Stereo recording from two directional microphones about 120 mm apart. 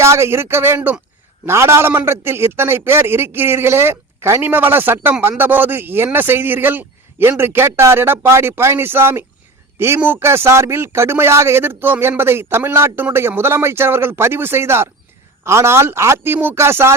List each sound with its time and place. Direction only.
0.0 s speech: 20° right (ahead or behind)